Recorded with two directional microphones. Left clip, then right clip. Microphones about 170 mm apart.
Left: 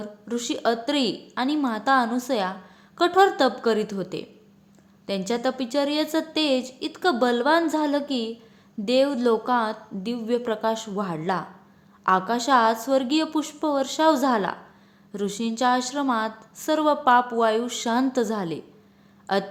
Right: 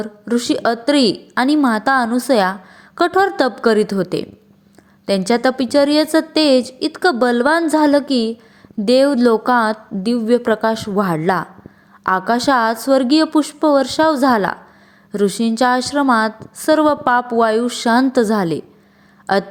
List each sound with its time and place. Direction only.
0.0 s a woman's voice: 40° right (ahead or behind)